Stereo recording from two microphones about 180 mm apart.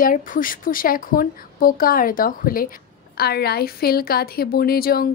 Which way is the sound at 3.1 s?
60° left (ahead or behind).